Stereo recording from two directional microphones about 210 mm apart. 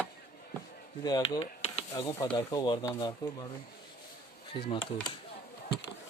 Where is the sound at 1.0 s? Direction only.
20° left (ahead or behind).